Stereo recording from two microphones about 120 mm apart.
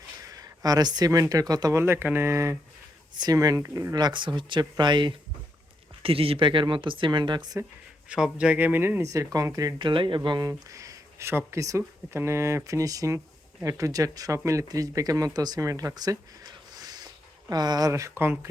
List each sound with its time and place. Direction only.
0.2 s speech: 30° right (ahead or behind)
1.8 s speech: 20° right (ahead or behind)
3.9 s speech: 40° right (ahead or behind)
6.0 s speech: 50° right (ahead or behind)
8.1 s speech: 10° right (ahead or behind); by 10.2 s 45° right (ahead or behind)
10.2 s speech: 30° right (ahead or behind)